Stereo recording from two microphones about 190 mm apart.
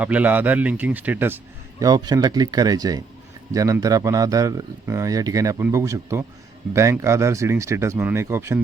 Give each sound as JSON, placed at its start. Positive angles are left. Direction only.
{"t": 0.0, "sound": "speech", "side_deg": -10}
{"t": 1.8, "sound": "speech", "side_deg": -20}